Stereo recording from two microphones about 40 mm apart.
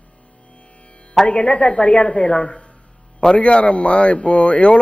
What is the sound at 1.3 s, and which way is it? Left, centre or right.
A woman's voice, left.